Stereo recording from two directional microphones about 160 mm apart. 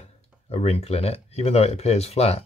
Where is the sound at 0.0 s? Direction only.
40° left (ahead or behind).